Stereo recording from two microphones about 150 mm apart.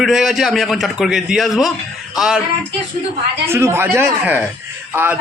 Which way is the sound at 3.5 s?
15° right (ahead or behind).